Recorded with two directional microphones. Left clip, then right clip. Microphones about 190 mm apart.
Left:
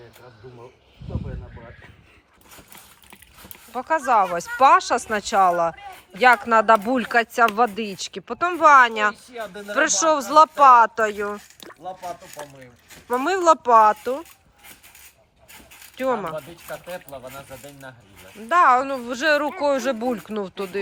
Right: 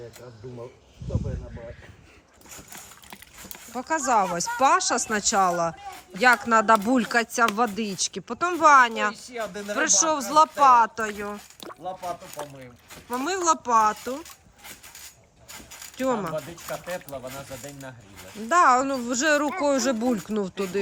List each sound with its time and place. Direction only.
3.1 s a sound: 5° right (ahead or behind)
4.4 s speech: centre (ahead or behind)
9.3 s speech: 20° left (ahead or behind)
9.7 s speech: centre (ahead or behind)
15.5 s a sound: centre (ahead or behind)
16.6 s speech: 30° left (ahead or behind)
18.3 s speech: 5° right (ahead or behind)